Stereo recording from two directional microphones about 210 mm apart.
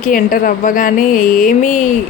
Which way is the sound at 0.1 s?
40° left (ahead or behind).